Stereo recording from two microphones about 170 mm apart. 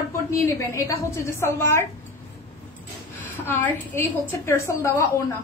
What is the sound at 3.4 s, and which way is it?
A woman's voice, 15° left (ahead or behind).